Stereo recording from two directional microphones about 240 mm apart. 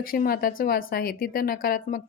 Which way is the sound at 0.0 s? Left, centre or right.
Left.